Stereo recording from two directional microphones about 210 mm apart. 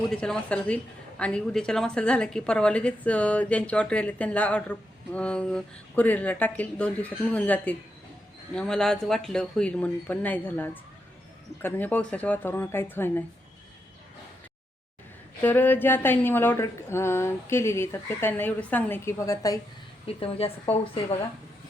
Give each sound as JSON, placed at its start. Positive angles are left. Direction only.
{"t": 0.1, "sound": "a woman's voice", "side_deg": 5}
{"t": 15.4, "sound": "a woman's voice", "side_deg": 10}
{"t": 20.1, "sound": "a woman's voice", "side_deg": 25}